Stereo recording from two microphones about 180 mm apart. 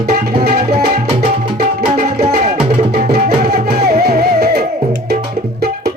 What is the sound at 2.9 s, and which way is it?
Music, 55° right (ahead or behind).